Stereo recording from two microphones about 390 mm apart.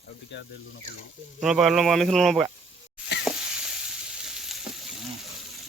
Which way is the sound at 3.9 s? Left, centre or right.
Centre.